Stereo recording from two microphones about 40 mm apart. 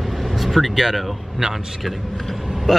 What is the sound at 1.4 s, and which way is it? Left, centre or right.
Speech, centre.